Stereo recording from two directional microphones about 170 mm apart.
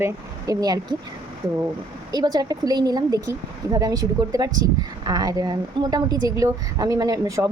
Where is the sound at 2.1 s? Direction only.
25° right (ahead or behind).